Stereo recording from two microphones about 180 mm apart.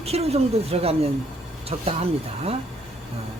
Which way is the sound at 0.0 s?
35° right (ahead or behind).